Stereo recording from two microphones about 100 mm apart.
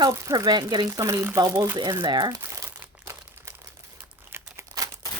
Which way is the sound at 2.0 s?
50° right (ahead or behind).